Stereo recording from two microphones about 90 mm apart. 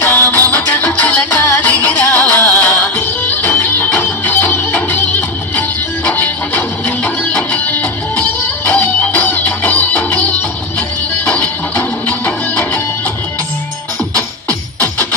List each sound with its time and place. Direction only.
0.0 s music: 20° left (ahead or behind)
6.1 s music: 20° left (ahead or behind)
11.3 s music: 15° left (ahead or behind)